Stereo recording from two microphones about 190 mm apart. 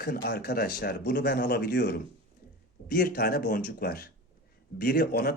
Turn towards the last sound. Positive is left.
turn(degrees=55)  # may be behind; listen again after turning